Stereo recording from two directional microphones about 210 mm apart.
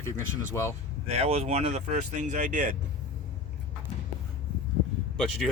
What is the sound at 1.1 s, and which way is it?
Speech, 30° right (ahead or behind).